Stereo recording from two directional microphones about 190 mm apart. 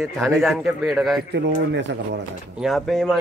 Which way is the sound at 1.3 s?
65° right (ahead or behind).